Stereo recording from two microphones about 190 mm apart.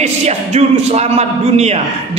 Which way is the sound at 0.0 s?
35° right (ahead or behind).